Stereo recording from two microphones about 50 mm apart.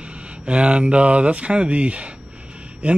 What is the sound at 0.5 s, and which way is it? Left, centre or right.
Speech, right.